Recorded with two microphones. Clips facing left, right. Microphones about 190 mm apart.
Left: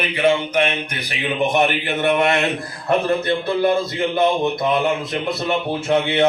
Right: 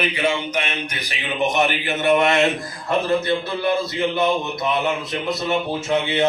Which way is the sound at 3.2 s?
50° left (ahead or behind).